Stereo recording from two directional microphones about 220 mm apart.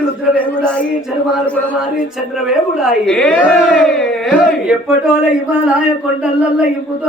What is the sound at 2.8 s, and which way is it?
A woman's voice, 5° left (ahead or behind).